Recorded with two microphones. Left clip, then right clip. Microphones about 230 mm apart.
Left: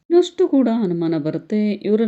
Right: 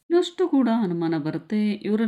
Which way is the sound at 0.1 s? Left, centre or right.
Centre.